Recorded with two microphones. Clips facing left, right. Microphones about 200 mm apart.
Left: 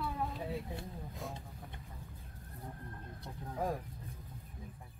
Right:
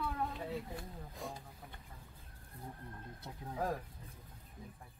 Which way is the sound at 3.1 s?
5° right (ahead or behind).